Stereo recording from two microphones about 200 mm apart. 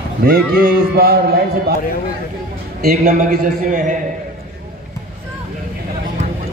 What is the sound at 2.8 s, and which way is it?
A man's voice, 35° right (ahead or behind).